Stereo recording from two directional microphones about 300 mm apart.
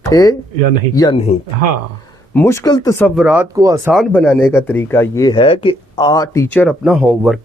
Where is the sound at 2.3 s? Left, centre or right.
Centre.